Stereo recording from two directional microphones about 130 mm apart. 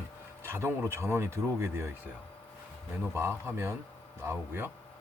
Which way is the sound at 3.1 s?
20° right (ahead or behind).